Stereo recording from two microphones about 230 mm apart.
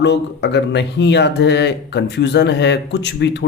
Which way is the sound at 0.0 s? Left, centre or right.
Left.